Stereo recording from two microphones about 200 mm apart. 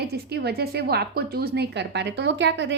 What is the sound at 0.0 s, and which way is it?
A woman's voice, 55° right (ahead or behind).